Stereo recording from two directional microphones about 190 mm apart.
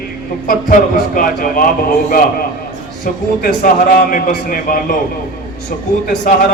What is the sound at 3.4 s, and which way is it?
A man's voice, 45° left (ahead or behind).